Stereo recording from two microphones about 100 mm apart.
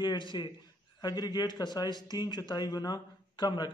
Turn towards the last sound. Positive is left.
turn(degrees=45)  # may be behind; listen again after turning